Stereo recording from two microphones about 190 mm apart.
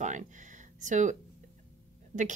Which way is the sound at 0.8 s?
40° right (ahead or behind).